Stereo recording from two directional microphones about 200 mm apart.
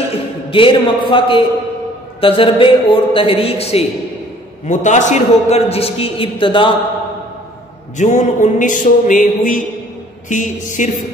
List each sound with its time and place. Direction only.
0.1 s a man's voice: 25° left (ahead or behind)
8.0 s music: 35° left (ahead or behind)